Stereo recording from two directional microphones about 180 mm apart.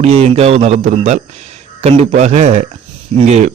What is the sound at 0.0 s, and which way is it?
A man's voice, 35° right (ahead or behind).